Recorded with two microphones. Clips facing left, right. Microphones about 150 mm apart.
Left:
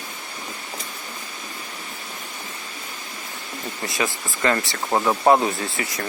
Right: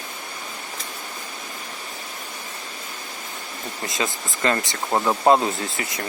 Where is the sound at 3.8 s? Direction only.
20° right (ahead or behind).